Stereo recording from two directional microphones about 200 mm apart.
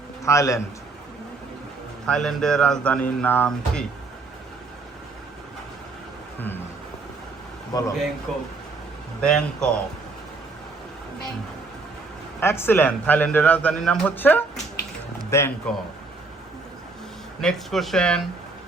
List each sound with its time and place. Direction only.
0.3 s a man's voice: 15° left (ahead or behind)
2.0 s speech: 5° left (ahead or behind)
7.7 s a man's voice: 15° left (ahead or behind)
8.3 s speech: centre (ahead or behind)
12.4 s a man's voice: 10° left (ahead or behind)
17.4 s speech: centre (ahead or behind)